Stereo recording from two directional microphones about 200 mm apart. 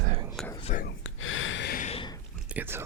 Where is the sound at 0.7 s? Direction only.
40° left (ahead or behind).